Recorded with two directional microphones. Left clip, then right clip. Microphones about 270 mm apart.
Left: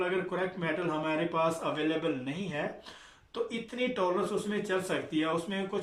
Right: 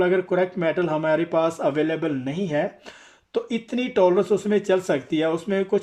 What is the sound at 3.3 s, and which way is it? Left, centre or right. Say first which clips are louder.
Speech: right 9 dB; right.